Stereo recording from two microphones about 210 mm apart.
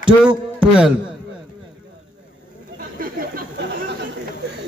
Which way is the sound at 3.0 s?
45° right (ahead or behind).